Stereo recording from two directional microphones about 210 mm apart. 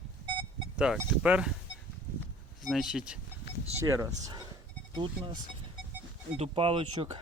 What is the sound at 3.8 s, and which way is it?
Speech, 15° right (ahead or behind).